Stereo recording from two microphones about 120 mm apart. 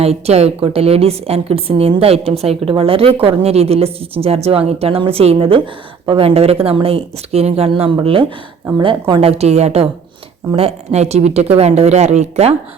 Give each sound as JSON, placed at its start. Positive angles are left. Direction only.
{"t": 0.0, "sound": "a woman's voice", "side_deg": -60}
{"t": 9.3, "sound": "a woman's voice", "side_deg": -65}